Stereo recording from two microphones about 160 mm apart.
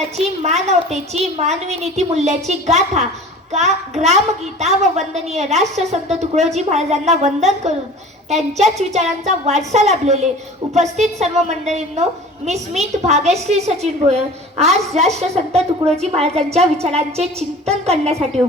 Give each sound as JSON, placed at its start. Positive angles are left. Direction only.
{"t": 0.4, "sound": "a woman's voice", "side_deg": -45}
{"t": 11.2, "sound": "a woman's voice", "side_deg": -45}